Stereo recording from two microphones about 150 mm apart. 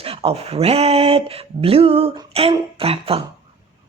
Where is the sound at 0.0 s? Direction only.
40° right (ahead or behind).